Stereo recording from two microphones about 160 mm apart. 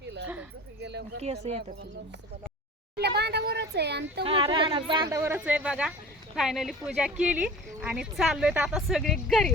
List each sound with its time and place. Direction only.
0.0 s a sound: 90° right
3.0 s speech: 90° right
4.2 s speech: 35° right (ahead or behind)
5.1 s a woman's voice: 15° right (ahead or behind); by 9.5 s centre (ahead or behind)